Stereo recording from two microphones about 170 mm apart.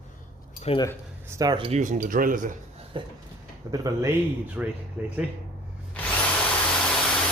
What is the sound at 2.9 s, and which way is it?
Speech, 30° right (ahead or behind).